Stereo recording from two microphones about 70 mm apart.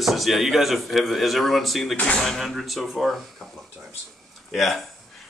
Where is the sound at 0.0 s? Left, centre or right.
Centre.